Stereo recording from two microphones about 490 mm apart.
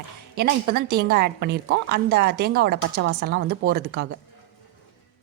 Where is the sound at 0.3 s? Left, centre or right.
Centre.